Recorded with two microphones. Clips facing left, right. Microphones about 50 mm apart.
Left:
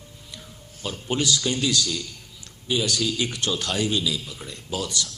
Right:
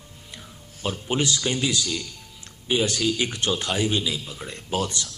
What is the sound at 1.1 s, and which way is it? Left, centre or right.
Speech, right.